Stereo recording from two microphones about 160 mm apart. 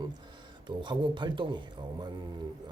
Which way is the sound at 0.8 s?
30° right (ahead or behind).